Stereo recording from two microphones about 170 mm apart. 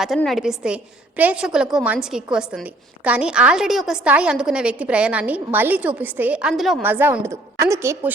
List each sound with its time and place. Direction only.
0.0 s a woman's voice: centre (ahead or behind)
6.8 s a woman's voice: 10° right (ahead or behind)